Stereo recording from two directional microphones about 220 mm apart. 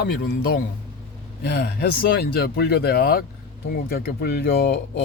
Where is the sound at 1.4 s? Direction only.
45° left (ahead or behind).